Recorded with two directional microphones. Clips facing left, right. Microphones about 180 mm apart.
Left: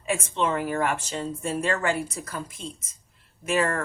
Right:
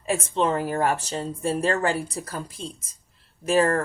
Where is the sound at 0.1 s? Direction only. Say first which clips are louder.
Right 2 dB; 35° right (ahead or behind).